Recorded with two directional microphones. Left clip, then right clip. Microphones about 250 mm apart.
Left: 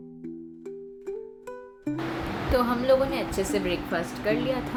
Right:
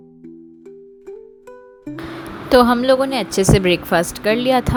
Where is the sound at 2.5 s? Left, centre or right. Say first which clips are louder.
Right 10 dB; right.